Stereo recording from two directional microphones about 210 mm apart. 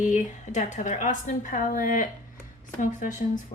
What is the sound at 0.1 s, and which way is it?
Speech, 35° left (ahead or behind).